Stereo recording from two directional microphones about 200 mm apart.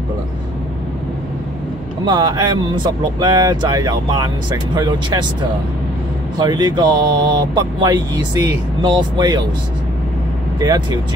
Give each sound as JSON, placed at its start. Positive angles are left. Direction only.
{"t": 2.0, "sound": "speech", "side_deg": -20}
{"t": 6.3, "sound": "speech", "side_deg": -20}
{"t": 10.6, "sound": "speech", "side_deg": -20}